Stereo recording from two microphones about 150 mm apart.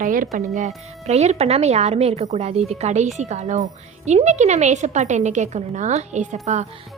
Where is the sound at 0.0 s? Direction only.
65° right (ahead or behind).